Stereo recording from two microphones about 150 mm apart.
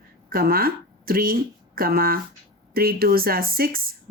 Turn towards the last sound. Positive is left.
turn(degrees=-80)